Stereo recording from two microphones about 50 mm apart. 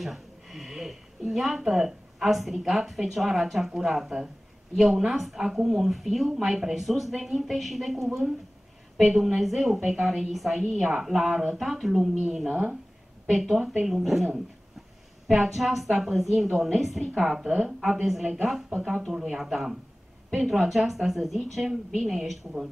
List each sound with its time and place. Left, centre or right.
0.0 s speech: centre
10.8 s a woman's voice: centre
12.4 s speech: right
13.3 s a woman's voice: centre